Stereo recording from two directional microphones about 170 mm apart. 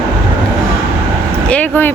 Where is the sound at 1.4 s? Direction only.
10° left (ahead or behind).